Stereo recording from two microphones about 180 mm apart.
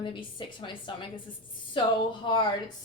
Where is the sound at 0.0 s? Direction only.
25° left (ahead or behind).